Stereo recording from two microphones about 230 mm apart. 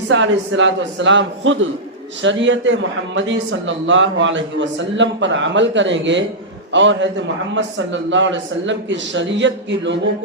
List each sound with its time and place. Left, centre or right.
0.1 s a man's voice: right